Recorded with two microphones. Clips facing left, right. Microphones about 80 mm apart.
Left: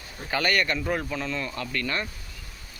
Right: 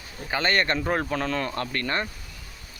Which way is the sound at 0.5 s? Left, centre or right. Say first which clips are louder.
Right 4 dB; right.